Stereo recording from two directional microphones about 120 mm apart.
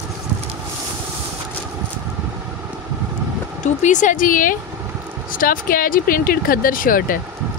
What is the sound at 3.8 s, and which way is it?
Speech, 90° left.